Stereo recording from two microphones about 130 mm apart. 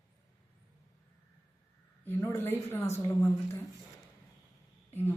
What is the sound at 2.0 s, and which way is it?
Speech, 20° left (ahead or behind).